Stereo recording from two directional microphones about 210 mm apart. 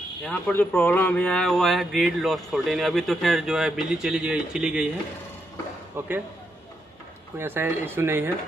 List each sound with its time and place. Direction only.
0.2 s speech: 10° left (ahead or behind)
5.9 s speech: 10° right (ahead or behind)
7.3 s speech: 10° right (ahead or behind)